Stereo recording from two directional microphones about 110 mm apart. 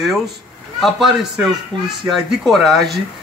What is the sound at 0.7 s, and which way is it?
A man's voice, centre (ahead or behind).